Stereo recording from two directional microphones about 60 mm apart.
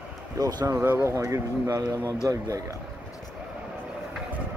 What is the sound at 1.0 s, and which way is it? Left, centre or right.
Speech, right.